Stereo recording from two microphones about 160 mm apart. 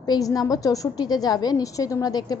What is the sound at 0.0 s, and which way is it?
A woman's voice, 25° left (ahead or behind).